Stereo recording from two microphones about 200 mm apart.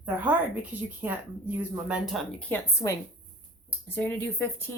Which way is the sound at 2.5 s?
15° left (ahead or behind).